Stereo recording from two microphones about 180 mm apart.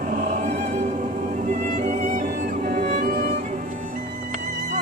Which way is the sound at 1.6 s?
45° right (ahead or behind).